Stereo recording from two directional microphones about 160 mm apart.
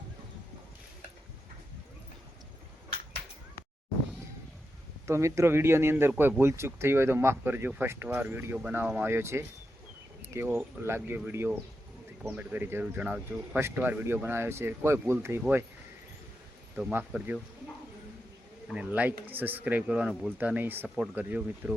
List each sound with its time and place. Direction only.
5.0 s speech: 15° right (ahead or behind)
16.7 s speech: 10° right (ahead or behind)
18.7 s speech: 10° right (ahead or behind)